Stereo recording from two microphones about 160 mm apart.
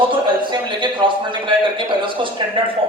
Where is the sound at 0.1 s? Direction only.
30° right (ahead or behind).